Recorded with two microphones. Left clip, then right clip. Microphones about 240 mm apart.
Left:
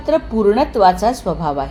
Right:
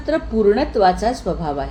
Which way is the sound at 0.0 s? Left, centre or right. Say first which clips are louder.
Left 2 dB; left.